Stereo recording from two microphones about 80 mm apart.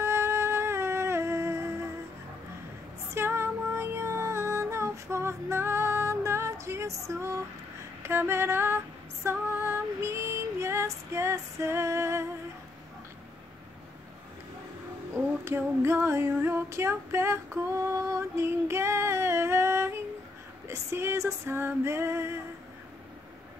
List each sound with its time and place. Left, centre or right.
0.0 s music: right
3.2 s music: right
8.0 s female singing: right
15.4 s female singing: right